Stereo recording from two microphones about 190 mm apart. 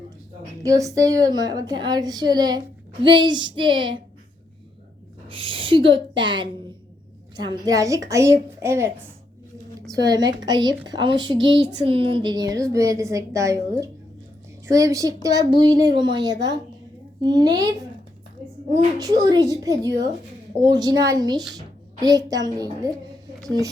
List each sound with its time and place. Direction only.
0.6 s a woman's voice: 15° right (ahead or behind)
5.3 s a woman's voice: 25° right (ahead or behind)
9.9 s a woman's voice: 20° right (ahead or behind)
11.3 s speech: 75° right (ahead or behind)
11.9 s a woman's voice: 30° right (ahead or behind)
14.7 s a woman's voice: 15° right (ahead or behind)
18.9 s a woman's voice: 20° right (ahead or behind)